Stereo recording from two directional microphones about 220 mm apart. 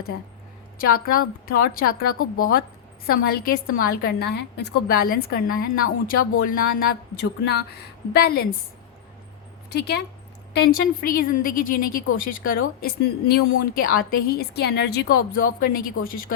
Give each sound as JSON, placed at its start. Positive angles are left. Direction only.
{"t": 0.8, "sound": "a woman's voice", "side_deg": 40}
{"t": 9.6, "sound": "a woman's voice", "side_deg": 50}